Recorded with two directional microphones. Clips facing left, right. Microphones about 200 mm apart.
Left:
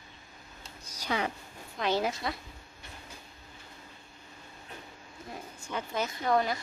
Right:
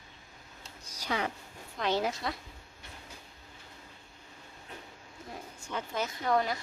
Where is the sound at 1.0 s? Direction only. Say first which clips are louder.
Left 1 dB; 15° left (ahead or behind).